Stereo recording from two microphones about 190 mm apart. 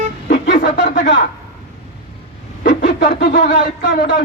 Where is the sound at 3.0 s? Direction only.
45° left (ahead or behind).